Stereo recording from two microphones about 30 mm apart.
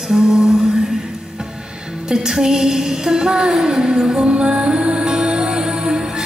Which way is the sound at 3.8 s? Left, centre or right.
Right.